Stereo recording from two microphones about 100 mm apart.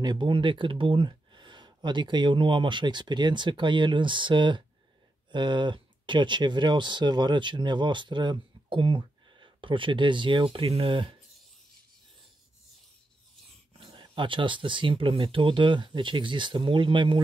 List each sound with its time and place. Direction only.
0.0 s speech: 50° right (ahead or behind)
13.7 s speech: 55° right (ahead or behind)